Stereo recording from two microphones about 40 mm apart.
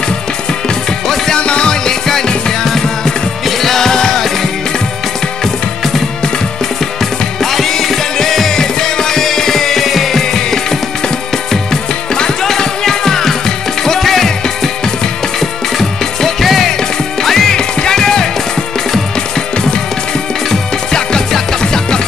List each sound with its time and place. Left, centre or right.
1.0 s music: centre
1.4 s music: left
7.5 s music: centre
12.4 s music: centre
15.8 s music: centre
21.3 s music: centre